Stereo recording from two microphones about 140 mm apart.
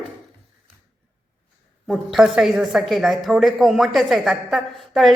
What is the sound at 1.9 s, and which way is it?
A woman's voice, centre (ahead or behind).